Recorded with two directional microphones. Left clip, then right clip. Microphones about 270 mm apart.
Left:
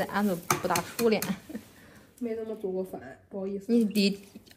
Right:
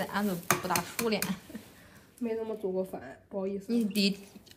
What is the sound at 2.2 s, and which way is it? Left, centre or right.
Speech, right.